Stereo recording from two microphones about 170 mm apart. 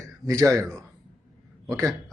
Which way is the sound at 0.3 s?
20° right (ahead or behind).